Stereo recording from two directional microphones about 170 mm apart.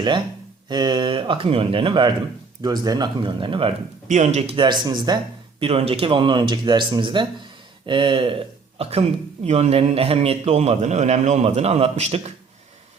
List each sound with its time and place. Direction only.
0.7 s speech: 25° right (ahead or behind)
4.1 s speech: 45° right (ahead or behind)